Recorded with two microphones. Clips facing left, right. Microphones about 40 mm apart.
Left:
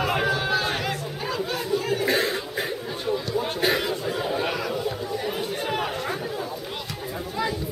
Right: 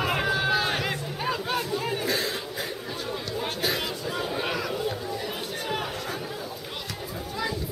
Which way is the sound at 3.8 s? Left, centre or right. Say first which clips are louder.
Left 4 dB; centre.